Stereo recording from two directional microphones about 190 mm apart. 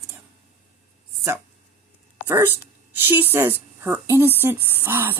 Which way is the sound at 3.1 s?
10° right (ahead or behind).